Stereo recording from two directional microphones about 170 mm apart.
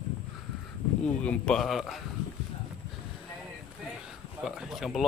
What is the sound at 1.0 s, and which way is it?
Speech, 5° left (ahead or behind).